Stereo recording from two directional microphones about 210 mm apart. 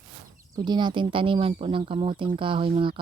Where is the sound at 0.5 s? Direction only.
20° right (ahead or behind).